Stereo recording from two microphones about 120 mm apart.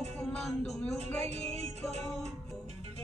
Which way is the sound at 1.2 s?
65° right (ahead or behind).